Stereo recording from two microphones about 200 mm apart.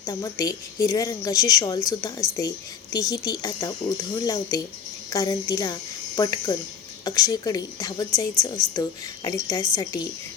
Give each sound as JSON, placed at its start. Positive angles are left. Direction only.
{"t": 0.0, "sound": "a woman's voice", "side_deg": 15}